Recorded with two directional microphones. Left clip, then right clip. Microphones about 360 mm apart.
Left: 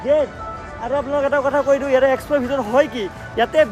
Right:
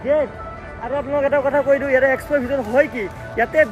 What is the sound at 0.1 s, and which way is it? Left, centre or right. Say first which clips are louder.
Speech: left 2 dB; centre.